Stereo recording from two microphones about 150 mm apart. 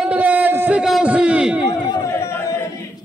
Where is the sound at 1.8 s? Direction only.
25° left (ahead or behind).